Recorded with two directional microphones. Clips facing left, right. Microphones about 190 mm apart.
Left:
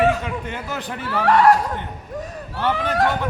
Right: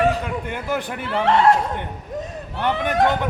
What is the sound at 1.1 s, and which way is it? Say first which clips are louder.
Speech: left 1 dB; 25° right (ahead or behind).